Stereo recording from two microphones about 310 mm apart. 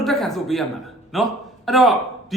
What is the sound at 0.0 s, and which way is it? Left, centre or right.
A man's voice, centre.